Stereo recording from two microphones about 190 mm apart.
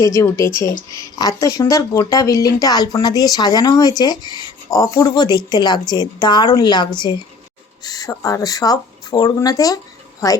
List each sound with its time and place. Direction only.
0.0 s speech: 15° left (ahead or behind)